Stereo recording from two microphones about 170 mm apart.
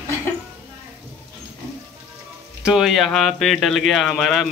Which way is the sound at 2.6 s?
5° right (ahead or behind).